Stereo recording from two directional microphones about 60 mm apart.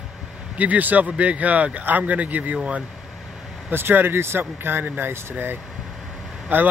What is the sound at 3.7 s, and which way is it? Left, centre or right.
Speech, right.